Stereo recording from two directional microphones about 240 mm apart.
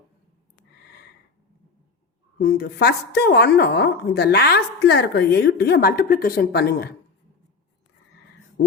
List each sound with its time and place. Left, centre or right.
2.4 s a woman's voice: left